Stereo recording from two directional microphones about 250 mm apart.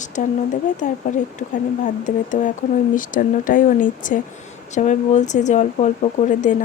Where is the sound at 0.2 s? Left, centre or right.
Left.